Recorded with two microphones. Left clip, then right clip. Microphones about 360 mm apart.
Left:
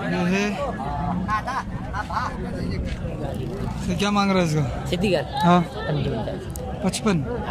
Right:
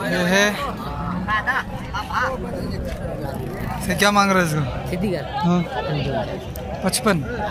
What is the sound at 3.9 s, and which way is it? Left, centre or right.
Speech, centre.